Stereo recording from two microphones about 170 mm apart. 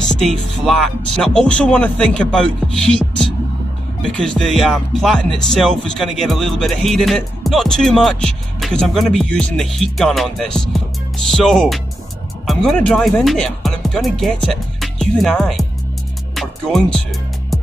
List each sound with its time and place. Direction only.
0.0 s music: 5° left (ahead or behind)